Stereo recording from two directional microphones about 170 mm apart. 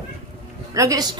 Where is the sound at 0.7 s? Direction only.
20° right (ahead or behind).